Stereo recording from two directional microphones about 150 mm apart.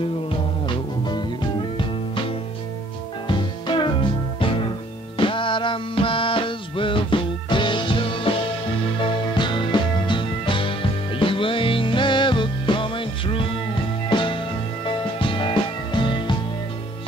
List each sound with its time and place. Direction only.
0.3 s music: 30° left (ahead or behind)
3.3 s music: 30° left (ahead or behind)